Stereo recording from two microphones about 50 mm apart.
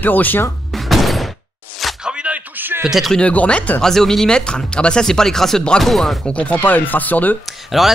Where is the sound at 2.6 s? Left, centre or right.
Right.